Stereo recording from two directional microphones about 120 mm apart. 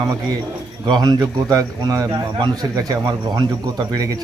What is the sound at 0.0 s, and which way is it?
A man's voice, 35° right (ahead or behind).